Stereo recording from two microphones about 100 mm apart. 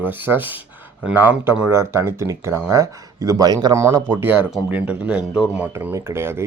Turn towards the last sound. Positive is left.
turn(degrees=-25)  # may be behind; listen again after turning